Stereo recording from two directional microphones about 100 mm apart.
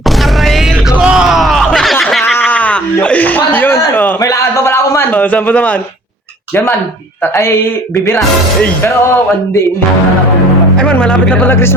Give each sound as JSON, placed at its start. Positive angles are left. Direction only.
{"t": 0.9, "sound": "music", "side_deg": -10}
{"t": 2.4, "sound": "a sound", "side_deg": 15}
{"t": 4.2, "sound": "a sound", "side_deg": 30}
{"t": 5.1, "sound": "speech", "side_deg": 15}
{"t": 7.3, "sound": "speech", "side_deg": 25}
{"t": 10.8, "sound": "speech", "side_deg": 10}